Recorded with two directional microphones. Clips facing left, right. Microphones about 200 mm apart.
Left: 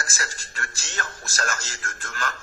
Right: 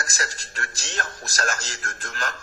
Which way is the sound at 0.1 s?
40° right (ahead or behind).